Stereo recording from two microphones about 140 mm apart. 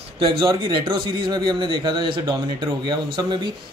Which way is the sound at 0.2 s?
35° right (ahead or behind).